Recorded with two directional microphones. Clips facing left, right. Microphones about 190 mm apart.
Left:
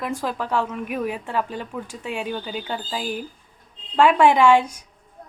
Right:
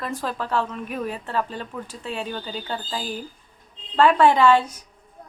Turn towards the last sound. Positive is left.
turn(degrees=10)  # may be behind; listen again after turning